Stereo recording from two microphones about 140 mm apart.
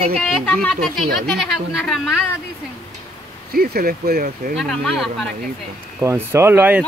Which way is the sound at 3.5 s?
90° right.